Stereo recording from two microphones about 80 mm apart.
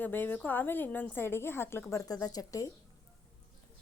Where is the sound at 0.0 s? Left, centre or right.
Left.